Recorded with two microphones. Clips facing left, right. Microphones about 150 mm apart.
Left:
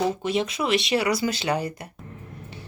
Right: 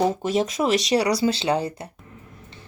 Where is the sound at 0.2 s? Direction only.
40° right (ahead or behind).